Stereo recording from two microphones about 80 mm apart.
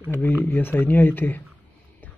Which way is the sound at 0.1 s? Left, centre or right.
Left.